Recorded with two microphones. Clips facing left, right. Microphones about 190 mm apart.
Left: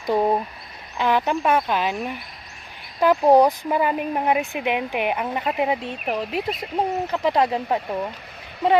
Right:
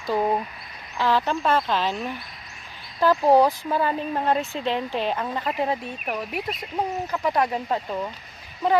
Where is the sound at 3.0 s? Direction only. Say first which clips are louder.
Left 2 dB; 15° left (ahead or behind).